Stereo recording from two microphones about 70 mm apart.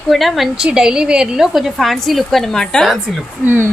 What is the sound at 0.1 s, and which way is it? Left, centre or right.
Speech, centre.